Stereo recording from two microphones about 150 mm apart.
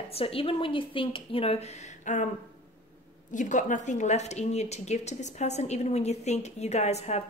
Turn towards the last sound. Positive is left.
turn(degrees=45)  # may be behind; listen again after turning